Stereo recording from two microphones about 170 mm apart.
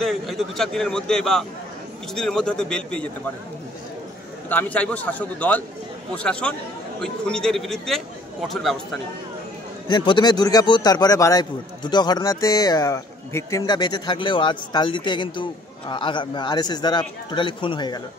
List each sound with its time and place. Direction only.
0.0 s a man's voice: centre (ahead or behind)
4.5 s a man's voice: 10° left (ahead or behind)
9.8 s a man's voice: 25° left (ahead or behind)